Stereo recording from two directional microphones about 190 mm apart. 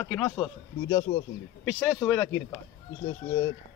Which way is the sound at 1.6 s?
Centre (ahead or behind).